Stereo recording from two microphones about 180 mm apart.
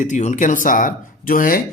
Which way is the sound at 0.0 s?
40° left (ahead or behind).